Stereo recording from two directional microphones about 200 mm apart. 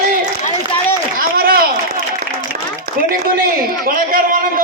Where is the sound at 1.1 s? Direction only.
45° right (ahead or behind).